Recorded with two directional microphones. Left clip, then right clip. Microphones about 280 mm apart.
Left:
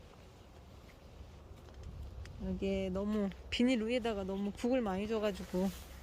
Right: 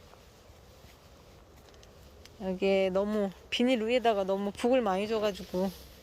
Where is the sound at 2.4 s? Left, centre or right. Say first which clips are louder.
Right 11 dB; centre.